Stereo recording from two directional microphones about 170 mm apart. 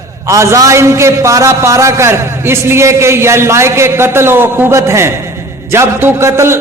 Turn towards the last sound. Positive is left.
turn(degrees=-15)  # may be behind; listen again after turning